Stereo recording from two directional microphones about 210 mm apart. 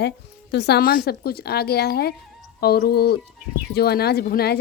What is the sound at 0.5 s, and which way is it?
A woman's voice, 50° left (ahead or behind).